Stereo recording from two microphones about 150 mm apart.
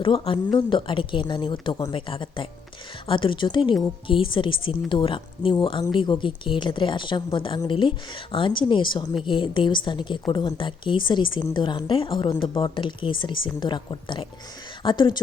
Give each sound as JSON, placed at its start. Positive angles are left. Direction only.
{"t": 0.0, "sound": "a woman's voice", "side_deg": 35}